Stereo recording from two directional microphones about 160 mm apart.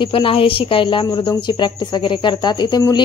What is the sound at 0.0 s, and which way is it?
A woman's voice, 35° left (ahead or behind).